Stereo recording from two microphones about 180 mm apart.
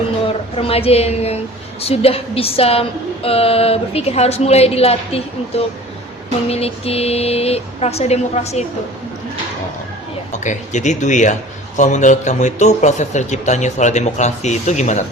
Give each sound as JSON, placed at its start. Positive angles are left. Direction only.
{"t": 0.3, "sound": "a woman's voice", "side_deg": 30}
{"t": 10.3, "sound": "a man's voice", "side_deg": 40}